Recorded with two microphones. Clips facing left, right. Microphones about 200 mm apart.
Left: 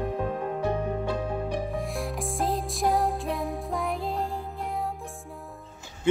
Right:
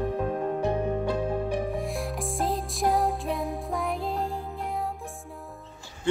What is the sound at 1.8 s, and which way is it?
Music, centre (ahead or behind).